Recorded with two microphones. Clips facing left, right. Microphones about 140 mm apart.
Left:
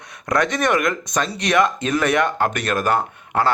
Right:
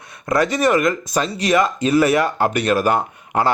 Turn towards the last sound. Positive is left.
turn(degrees=-10)  # may be behind; listen again after turning